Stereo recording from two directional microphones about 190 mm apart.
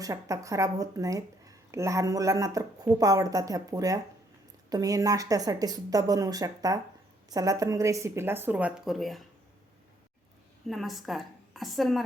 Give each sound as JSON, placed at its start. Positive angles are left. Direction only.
{"t": 0.0, "sound": "a woman's voice", "side_deg": -15}
{"t": 10.7, "sound": "a woman's voice", "side_deg": 0}